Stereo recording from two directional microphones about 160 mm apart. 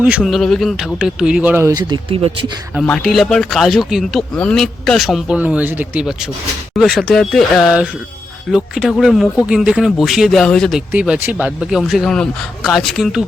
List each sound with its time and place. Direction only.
0.2 s speech: centre (ahead or behind); by 1.8 s 15° right (ahead or behind)
1.9 s speech: 35° right (ahead or behind)
2.8 s speech: 5° left (ahead or behind)